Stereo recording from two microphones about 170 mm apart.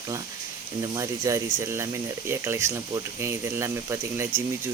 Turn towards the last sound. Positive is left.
turn(degrees=-15)  # may be behind; listen again after turning